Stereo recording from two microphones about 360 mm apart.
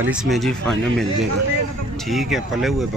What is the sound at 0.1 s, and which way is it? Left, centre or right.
Speech, centre.